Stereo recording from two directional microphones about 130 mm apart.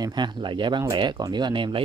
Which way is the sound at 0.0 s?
35° right (ahead or behind).